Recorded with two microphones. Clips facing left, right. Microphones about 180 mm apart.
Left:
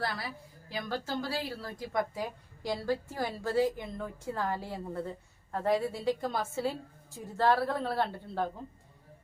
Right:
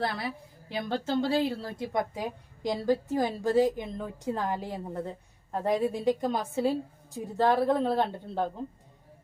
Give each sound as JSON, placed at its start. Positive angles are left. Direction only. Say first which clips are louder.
{"t": 0.7, "sound": "a woman's voice", "louder": "right 5 dB", "side_deg": -25}